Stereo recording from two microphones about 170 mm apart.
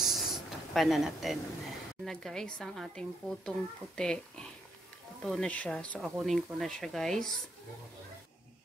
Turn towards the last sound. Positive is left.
turn(degrees=5)  # may be behind; listen again after turning